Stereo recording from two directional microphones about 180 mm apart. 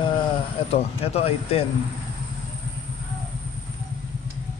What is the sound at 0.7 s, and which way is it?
Speech, 35° left (ahead or behind).